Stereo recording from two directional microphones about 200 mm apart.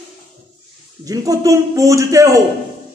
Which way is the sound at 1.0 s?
15° right (ahead or behind).